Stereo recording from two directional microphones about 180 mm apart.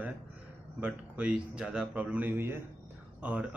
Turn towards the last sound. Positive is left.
turn(degrees=-5)  # may be behind; listen again after turning